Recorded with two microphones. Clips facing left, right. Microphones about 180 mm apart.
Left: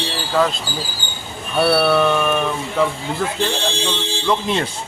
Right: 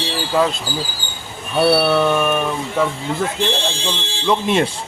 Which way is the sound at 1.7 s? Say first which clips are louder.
Even; 10° right (ahead or behind).